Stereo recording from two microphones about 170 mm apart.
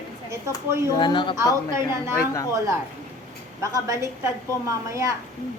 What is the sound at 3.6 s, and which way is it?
A woman's voice, 20° right (ahead or behind).